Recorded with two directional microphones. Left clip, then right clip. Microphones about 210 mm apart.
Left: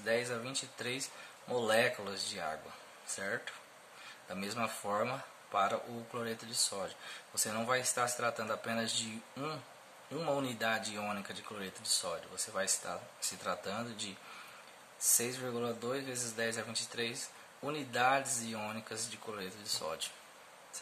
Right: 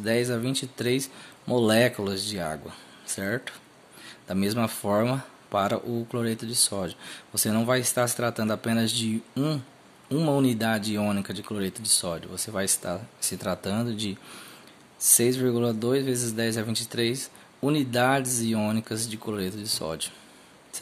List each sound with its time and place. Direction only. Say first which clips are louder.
0.0 s speech: right 8 dB; 45° right (ahead or behind)
15.1 s speech: right 16 dB; 40° right (ahead or behind)